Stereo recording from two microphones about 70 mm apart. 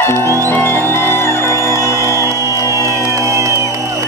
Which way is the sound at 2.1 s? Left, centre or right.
Right.